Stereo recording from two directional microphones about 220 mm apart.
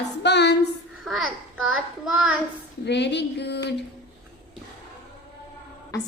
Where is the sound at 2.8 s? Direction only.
50° left (ahead or behind).